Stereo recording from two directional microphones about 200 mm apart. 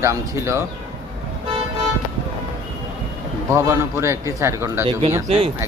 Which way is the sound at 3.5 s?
15° right (ahead or behind).